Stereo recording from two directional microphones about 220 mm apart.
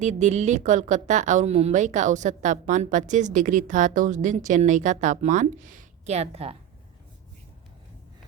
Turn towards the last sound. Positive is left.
turn(degrees=-30)  # may be behind; listen again after turning